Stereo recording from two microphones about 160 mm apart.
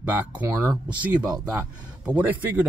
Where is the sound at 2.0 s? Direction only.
10° right (ahead or behind).